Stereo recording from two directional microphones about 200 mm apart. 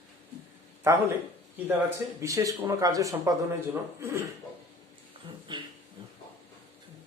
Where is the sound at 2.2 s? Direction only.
15° right (ahead or behind).